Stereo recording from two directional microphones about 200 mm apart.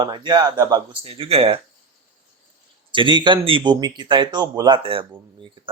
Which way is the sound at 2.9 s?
25° right (ahead or behind).